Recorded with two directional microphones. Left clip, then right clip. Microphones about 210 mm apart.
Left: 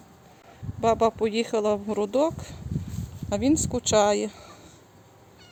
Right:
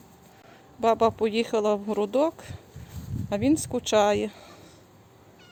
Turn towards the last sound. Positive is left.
turn(degrees=0)  # may be behind; listen again after turning